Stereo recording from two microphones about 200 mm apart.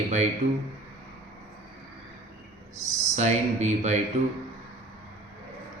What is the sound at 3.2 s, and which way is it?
Speech, 35° right (ahead or behind).